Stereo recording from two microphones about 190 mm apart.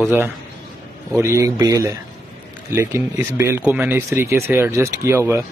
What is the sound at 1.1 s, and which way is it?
Speech, 15° right (ahead or behind).